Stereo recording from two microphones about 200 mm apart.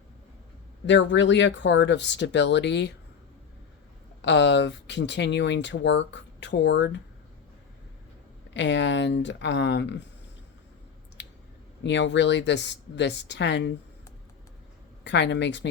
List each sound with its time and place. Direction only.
0.9 s speech: 65° left (ahead or behind)
4.2 s speech: 60° left (ahead or behind)
8.4 s speech: 60° left (ahead or behind)
11.2 s clicking: 65° left (ahead or behind)
11.8 s speech: 60° left (ahead or behind)
15.0 s speech: 60° left (ahead or behind)